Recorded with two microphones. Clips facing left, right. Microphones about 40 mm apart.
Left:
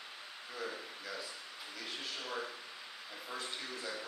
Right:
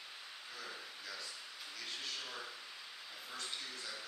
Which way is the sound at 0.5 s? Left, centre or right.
Left.